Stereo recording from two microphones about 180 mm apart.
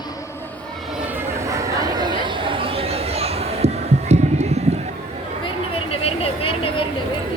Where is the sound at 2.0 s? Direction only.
25° right (ahead or behind).